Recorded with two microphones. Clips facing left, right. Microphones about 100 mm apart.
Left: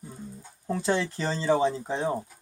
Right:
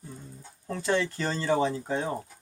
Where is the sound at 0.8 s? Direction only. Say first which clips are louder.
Even; 30° left (ahead or behind).